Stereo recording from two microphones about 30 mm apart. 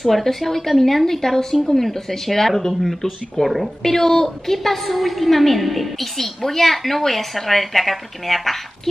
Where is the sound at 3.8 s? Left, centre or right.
Centre.